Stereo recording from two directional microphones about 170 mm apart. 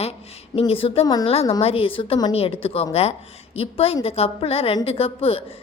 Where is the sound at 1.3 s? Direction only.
35° left (ahead or behind).